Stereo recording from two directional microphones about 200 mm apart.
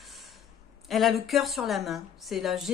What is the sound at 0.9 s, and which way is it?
A woman's voice, centre (ahead or behind).